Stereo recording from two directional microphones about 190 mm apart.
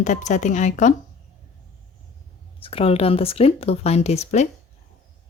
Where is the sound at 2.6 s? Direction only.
30° left (ahead or behind).